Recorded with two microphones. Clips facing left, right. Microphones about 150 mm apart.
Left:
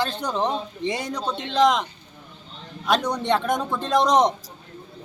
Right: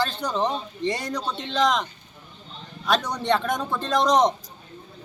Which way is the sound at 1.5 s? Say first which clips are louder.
Left 3 dB; 20° left (ahead or behind).